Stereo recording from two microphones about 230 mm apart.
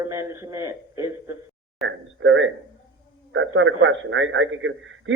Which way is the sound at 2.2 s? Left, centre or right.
Right.